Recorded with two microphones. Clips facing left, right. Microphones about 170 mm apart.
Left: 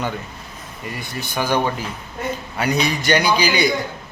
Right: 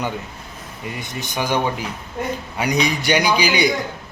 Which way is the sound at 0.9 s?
15° right (ahead or behind).